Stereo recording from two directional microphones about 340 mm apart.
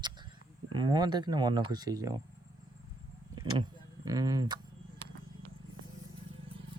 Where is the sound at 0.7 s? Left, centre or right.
Centre.